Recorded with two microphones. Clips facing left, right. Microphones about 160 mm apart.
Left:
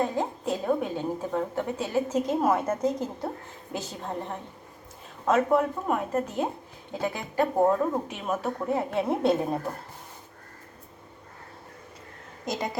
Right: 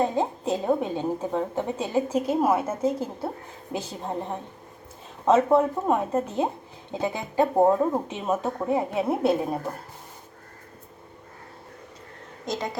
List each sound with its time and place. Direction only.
0.0 s a woman's voice: 20° right (ahead or behind); by 9.6 s 5° right (ahead or behind)